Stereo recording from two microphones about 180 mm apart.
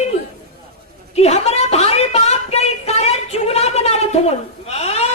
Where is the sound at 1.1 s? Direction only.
35° left (ahead or behind).